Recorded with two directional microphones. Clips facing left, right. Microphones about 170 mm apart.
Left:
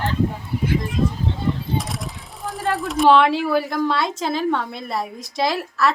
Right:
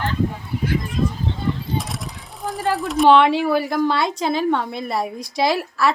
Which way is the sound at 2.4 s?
Centre (ahead or behind).